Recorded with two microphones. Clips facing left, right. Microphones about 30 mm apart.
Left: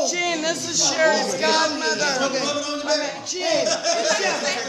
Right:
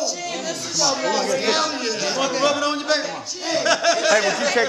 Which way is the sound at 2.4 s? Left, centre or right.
Right.